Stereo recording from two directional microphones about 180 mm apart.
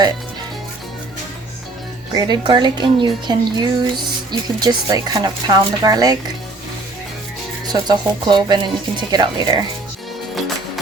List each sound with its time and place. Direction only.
2.1 s speech: 25° right (ahead or behind)
7.7 s speech: 25° right (ahead or behind)